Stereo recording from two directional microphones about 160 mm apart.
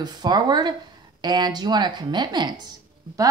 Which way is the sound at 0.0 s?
25° right (ahead or behind).